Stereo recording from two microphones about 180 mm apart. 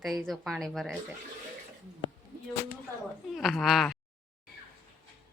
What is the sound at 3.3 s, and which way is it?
Speech, centre (ahead or behind).